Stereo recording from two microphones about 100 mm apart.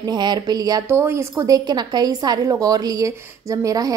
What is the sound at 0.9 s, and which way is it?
A woman's voice, 25° right (ahead or behind).